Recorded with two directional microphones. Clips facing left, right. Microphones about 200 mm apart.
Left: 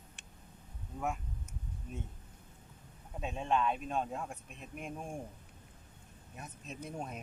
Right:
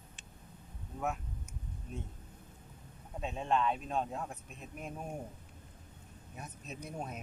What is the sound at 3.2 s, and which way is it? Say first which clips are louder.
Speech: even; centre (ahead or behind).